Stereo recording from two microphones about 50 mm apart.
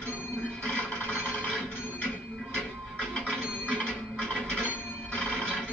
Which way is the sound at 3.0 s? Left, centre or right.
Centre.